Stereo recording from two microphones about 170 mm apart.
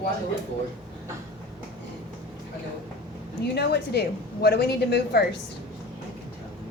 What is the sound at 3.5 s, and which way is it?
A woman's voice, 75° left (ahead or behind).